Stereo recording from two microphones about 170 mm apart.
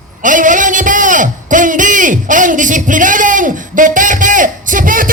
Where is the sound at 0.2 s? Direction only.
50° right (ahead or behind).